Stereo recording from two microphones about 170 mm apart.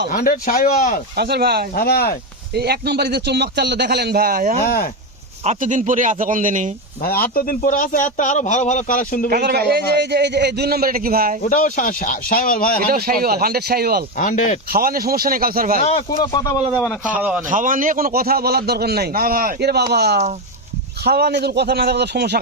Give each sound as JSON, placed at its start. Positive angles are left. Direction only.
{"t": 0.1, "sound": "speech", "side_deg": 55}
{"t": 1.1, "sound": "a man's voice", "side_deg": -70}
{"t": 1.7, "sound": "speech", "side_deg": 65}
{"t": 2.6, "sound": "a man's voice", "side_deg": -75}
{"t": 7.0, "sound": "a man's voice", "side_deg": 60}
{"t": 9.3, "sound": "a man's voice", "side_deg": -70}
{"t": 11.4, "sound": "a man's voice", "side_deg": 50}
{"t": 12.8, "sound": "a man's voice", "side_deg": -60}
{"t": 14.2, "sound": "a man's voice", "side_deg": 50}
{"t": 14.7, "sound": "a man's voice", "side_deg": -60}
{"t": 16.1, "sound": "speech", "side_deg": 20}
{"t": 17.1, "sound": "a man's voice", "side_deg": -10}
{"t": 17.5, "sound": "a man's voice", "side_deg": -50}